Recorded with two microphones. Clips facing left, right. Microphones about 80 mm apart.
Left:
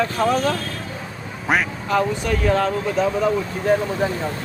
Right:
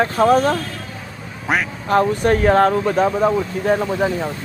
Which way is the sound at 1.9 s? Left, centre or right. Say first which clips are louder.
Right 6 dB; right.